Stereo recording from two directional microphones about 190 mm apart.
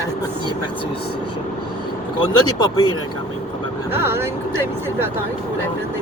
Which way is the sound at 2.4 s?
20° left (ahead or behind).